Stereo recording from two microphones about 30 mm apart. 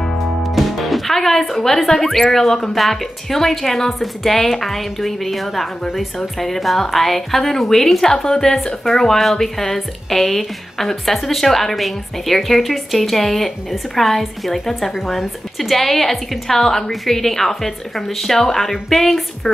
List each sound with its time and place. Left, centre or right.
0.4 s music: centre
1.9 s a woman's voice: centre
14.9 s a woman's voice: centre
19.4 s speech: centre